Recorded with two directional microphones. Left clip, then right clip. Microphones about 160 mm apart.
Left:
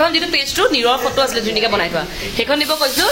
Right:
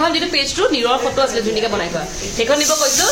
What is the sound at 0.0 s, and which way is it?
Speech, 5° left (ahead or behind).